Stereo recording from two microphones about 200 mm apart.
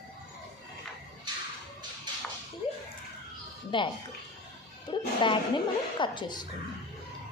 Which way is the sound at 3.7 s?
25° left (ahead or behind).